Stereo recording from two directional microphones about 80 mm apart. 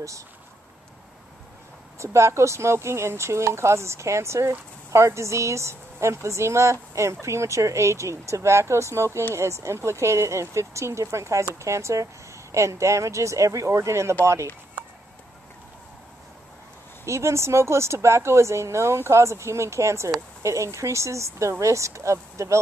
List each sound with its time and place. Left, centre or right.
2.0 s speech: right
17.0 s speech: right